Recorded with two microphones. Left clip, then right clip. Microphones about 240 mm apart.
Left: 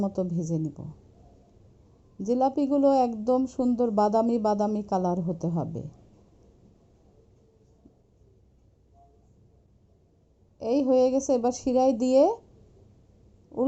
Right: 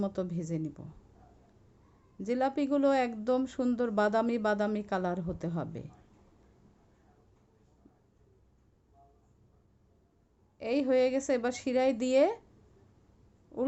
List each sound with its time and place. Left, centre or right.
0.3 s a woman's voice: right
2.2 s a woman's voice: right
10.6 s a woman's voice: right